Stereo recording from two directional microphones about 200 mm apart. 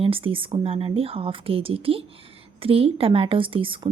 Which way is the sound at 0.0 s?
25° right (ahead or behind).